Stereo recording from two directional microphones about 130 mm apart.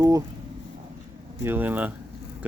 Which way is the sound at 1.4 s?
15° right (ahead or behind).